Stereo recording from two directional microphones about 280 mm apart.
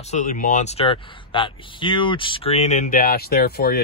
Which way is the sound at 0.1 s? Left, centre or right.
Left.